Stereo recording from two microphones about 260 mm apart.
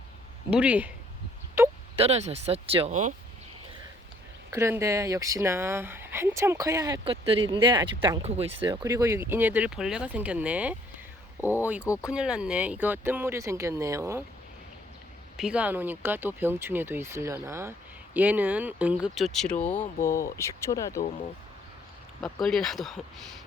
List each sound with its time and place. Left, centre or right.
0.5 s speech: centre
2.0 s speech: right
4.5 s speech: centre
15.4 s speech: centre
22.2 s speech: centre